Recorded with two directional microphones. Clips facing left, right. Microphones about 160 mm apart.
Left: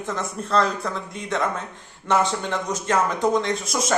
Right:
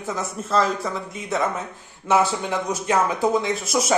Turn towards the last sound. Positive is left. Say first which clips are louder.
# right 2 dB
turn(degrees=-5)  # may be behind; listen again after turning